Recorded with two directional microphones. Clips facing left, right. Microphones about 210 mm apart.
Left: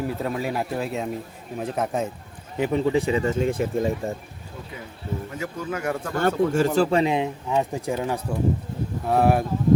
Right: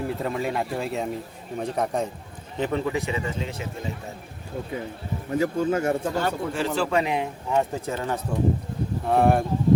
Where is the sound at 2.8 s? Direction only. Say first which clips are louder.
Left 6 dB; 30° left (ahead or behind); by 3.9 s 50° left (ahead or behind).